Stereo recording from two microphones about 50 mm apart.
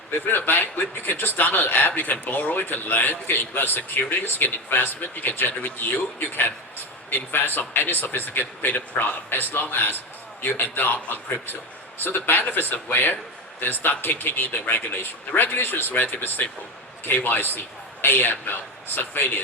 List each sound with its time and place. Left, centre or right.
0.3 s a man's voice: left